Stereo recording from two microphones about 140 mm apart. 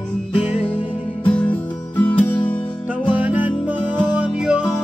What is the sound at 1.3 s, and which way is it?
Music, 10° left (ahead or behind).